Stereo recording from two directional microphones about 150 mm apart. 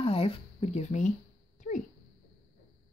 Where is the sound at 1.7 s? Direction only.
65° left (ahead or behind).